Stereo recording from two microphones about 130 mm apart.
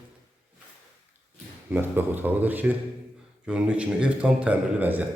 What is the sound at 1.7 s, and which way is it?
A man's voice, 15° right (ahead or behind).